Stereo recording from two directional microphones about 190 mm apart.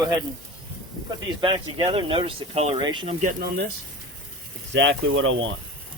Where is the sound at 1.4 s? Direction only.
25° right (ahead or behind).